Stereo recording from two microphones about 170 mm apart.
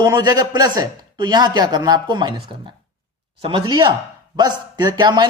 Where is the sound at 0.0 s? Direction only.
25° right (ahead or behind).